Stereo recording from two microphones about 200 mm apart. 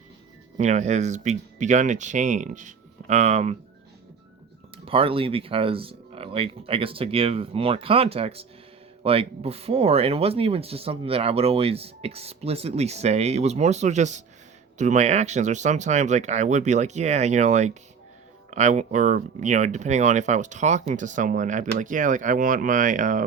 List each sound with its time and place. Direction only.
0.5 s speech: 35° right (ahead or behind)
4.9 s speech: 25° right (ahead or behind)